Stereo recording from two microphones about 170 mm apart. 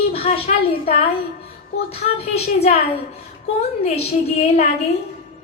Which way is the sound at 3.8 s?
35° left (ahead or behind).